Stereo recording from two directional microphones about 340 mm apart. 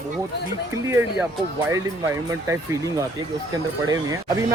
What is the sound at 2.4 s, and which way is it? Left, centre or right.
Speech, centre.